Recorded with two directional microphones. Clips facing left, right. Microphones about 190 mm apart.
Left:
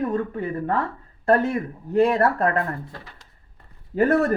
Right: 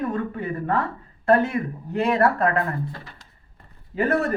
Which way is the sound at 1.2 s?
40° left (ahead or behind).